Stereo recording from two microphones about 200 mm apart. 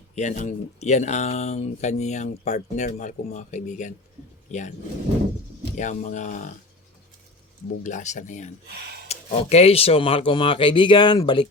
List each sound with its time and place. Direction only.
0.2 s speech: 35° left (ahead or behind)
5.7 s speech: 40° left (ahead or behind)
7.9 s speech: 35° left (ahead or behind)
8.6 s speech: 55° right (ahead or behind)
9.0 s speech: 30° left (ahead or behind)